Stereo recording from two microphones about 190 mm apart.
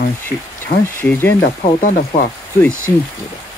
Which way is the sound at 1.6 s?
45° left (ahead or behind).